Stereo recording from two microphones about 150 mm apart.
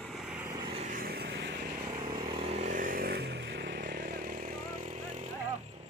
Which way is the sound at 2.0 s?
35° right (ahead or behind).